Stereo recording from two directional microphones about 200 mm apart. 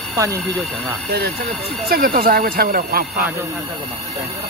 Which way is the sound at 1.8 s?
50° right (ahead or behind).